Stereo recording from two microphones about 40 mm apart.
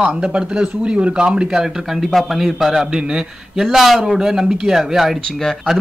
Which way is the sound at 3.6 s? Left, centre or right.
Centre.